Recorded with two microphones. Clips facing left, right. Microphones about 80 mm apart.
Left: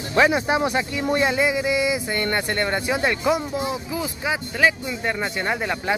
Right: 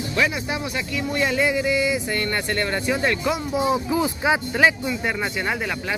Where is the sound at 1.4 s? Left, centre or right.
Centre.